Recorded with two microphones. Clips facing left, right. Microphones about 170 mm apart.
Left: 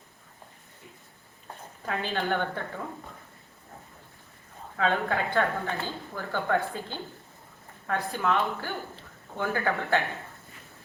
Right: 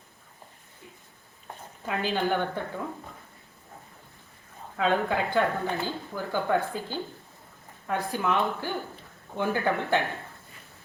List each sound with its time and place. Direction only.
1.9 s speech: 10° right (ahead or behind)
4.8 s speech: 15° right (ahead or behind)